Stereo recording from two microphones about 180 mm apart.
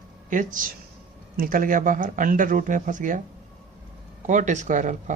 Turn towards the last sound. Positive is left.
turn(degrees=-45)  # may be behind; listen again after turning